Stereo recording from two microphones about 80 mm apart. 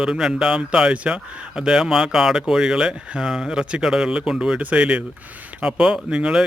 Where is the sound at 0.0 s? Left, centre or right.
Centre.